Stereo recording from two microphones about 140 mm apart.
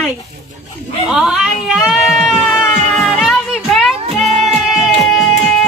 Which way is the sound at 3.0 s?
Centre (ahead or behind).